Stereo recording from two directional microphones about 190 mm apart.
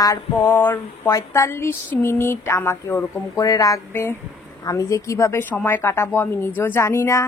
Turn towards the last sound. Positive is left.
turn(degrees=15)  # may be behind; listen again after turning